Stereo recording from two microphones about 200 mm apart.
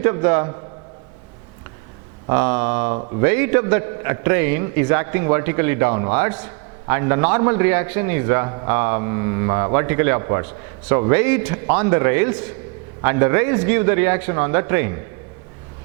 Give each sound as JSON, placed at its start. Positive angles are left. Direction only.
{"t": 0.0, "sound": "a man's voice", "side_deg": -15}
{"t": 2.3, "sound": "a man's voice", "side_deg": -15}
{"t": 2.9, "sound": "speech", "side_deg": -30}
{"t": 3.2, "sound": "a man's voice", "side_deg": -15}